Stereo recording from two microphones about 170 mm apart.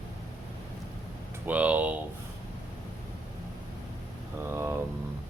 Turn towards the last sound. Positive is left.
turn(degrees=-15)  # may be behind; listen again after turning